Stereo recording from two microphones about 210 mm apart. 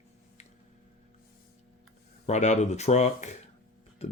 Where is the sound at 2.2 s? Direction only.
35° left (ahead or behind).